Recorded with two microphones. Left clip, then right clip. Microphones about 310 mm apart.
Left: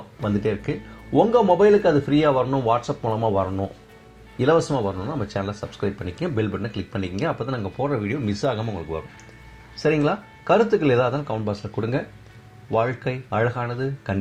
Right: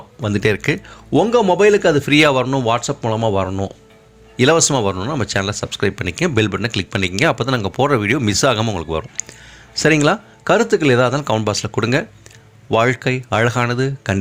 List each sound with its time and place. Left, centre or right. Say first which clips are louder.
0.2 s speech: right 7 dB; right